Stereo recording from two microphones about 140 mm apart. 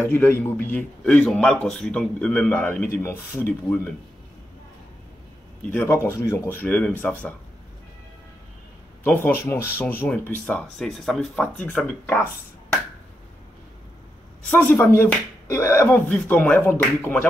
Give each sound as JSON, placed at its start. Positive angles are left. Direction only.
{"t": 0.0, "sound": "a man's voice", "side_deg": 15}
{"t": 5.7, "sound": "a man's voice", "side_deg": 15}
{"t": 9.0, "sound": "a man's voice", "side_deg": 15}
{"t": 14.5, "sound": "a man's voice", "side_deg": 10}
{"t": 15.0, "sound": "a man's voice", "side_deg": 20}